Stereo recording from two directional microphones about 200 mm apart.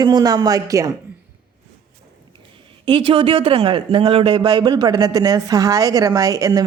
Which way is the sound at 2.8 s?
25° right (ahead or behind).